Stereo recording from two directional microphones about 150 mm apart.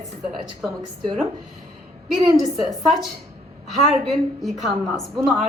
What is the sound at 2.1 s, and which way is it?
Speech, centre (ahead or behind).